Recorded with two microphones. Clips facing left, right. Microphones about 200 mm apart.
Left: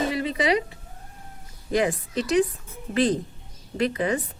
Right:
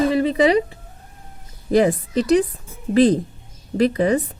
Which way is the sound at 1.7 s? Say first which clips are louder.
Right 7 dB; 35° right (ahead or behind).